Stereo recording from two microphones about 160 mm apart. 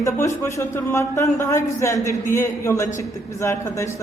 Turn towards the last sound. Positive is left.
turn(degrees=20)  # may be behind; listen again after turning